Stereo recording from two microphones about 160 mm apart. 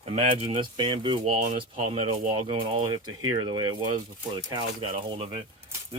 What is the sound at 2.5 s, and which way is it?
Speech, 30° right (ahead or behind).